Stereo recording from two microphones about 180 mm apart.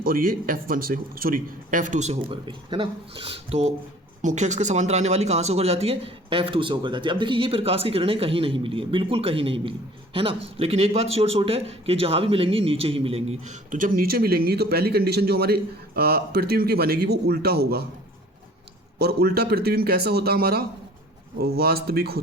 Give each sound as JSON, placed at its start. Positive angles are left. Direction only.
{"t": 0.0, "sound": "a man's voice", "side_deg": -55}
{"t": 2.5, "sound": "a man's voice", "side_deg": -25}
{"t": 18.9, "sound": "a man's voice", "side_deg": -60}